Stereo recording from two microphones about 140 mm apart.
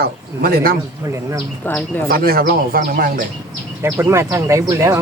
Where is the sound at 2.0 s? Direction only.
90° right.